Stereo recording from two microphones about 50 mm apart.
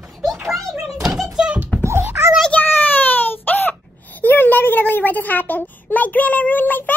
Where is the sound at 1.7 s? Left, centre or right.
Left.